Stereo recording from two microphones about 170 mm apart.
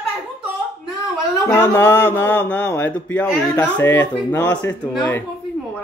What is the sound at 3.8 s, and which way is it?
Speech, 20° left (ahead or behind).